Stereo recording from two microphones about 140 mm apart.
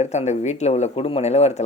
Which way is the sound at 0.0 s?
55° left (ahead or behind).